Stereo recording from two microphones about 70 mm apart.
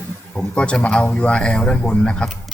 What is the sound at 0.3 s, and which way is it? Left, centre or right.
A man's voice, centre.